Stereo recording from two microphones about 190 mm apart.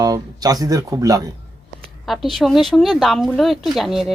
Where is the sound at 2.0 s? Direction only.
Centre (ahead or behind).